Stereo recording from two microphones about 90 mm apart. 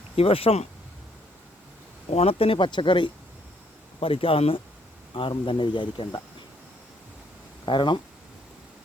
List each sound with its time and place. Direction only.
0.2 s speech: 90° left
2.2 s speech: 90° left
2.6 s speech: 65° left (ahead or behind)
4.0 s speech: 90° left
5.5 s speech: 60° left (ahead or behind)
7.6 s speech: 60° left (ahead or behind)